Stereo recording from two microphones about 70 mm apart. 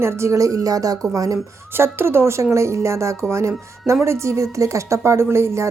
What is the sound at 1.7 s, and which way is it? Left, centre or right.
A woman's voice, right.